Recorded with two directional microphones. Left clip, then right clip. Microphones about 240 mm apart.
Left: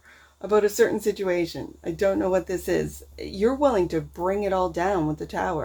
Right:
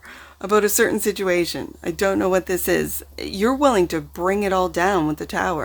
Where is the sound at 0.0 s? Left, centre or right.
Right.